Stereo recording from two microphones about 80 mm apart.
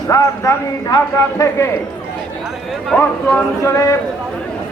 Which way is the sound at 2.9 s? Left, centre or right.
Centre.